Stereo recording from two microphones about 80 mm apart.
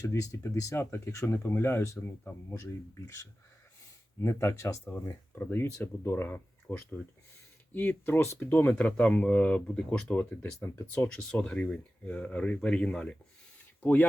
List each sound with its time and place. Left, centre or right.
0.0 s speech: left
4.2 s speech: left
5.3 s speech: left
10.6 s speech: left
11.1 s speech: centre
13.8 s speech: left